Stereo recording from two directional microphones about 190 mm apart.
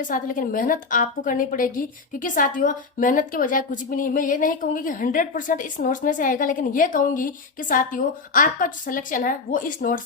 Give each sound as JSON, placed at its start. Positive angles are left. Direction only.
{"t": 0.1, "sound": "a woman's voice", "side_deg": 45}